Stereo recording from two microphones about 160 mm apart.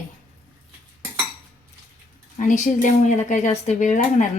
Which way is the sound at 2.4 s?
55° left (ahead or behind).